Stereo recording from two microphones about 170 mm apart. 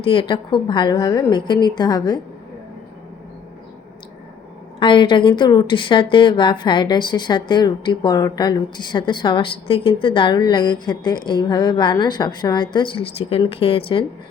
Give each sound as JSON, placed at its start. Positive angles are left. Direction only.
{"t": 0.0, "sound": "a woman's voice", "side_deg": 30}
{"t": 4.8, "sound": "a woman's voice", "side_deg": 30}